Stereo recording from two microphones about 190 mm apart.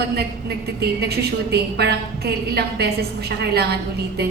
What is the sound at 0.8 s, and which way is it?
A woman's voice, 55° right (ahead or behind).